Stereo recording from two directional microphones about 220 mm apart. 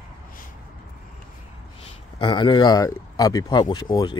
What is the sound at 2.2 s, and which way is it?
Speech, 20° left (ahead or behind).